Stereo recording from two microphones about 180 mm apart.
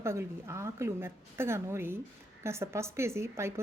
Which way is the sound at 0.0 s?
15° right (ahead or behind).